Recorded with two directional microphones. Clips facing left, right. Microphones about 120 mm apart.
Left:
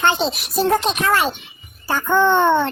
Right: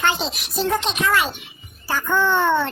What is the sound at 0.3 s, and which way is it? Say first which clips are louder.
Speech: left 4 dB; 40° left (ahead or behind).